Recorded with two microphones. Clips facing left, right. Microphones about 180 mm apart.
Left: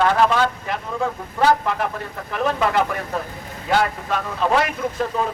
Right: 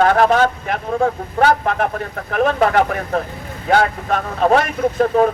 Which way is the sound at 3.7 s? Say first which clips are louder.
Right 4 dB; 55° right (ahead or behind).